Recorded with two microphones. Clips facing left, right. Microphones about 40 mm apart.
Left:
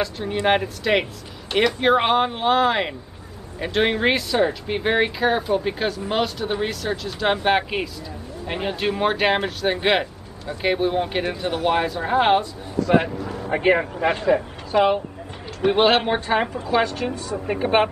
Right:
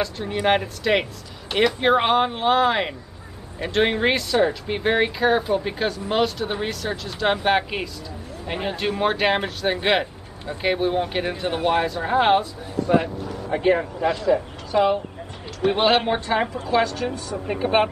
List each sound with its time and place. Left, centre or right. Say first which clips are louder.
0.0 s speech: left 1 dB; centre
12.9 s speech: left 1 dB; left
13.5 s speech: left 1 dB; left
13.9 s speech: left 1 dB; left
14.7 s speech: left 1 dB; left
15.6 s speech: left 1 dB; centre
16.8 s a woman's voice: even; left
17.5 s speech: left 1 dB; centre